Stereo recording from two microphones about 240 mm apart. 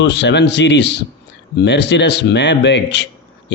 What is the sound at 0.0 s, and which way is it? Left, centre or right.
A man's voice, left.